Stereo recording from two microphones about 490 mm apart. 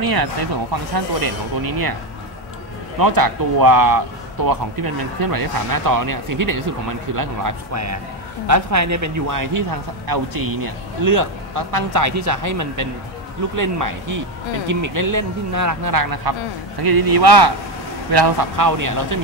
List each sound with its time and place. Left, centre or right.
0.0 s speech: right
3.0 s speech: right